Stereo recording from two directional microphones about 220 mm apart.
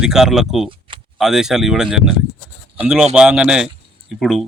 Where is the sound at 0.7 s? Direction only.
25° right (ahead or behind).